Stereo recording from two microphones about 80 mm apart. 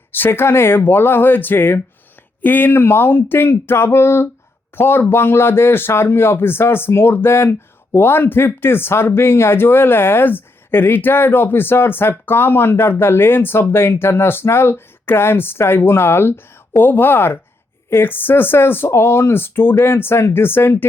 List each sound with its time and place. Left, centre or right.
0.1 s speech: left